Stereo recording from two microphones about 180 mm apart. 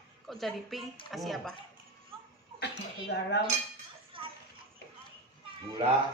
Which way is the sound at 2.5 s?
70° left (ahead or behind).